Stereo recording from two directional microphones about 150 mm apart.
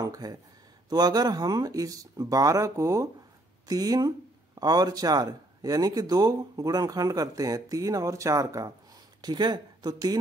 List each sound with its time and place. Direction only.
0.0 s speech: 25° right (ahead or behind)